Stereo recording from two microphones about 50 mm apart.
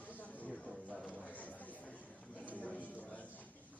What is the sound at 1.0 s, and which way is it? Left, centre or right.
Chatter, left.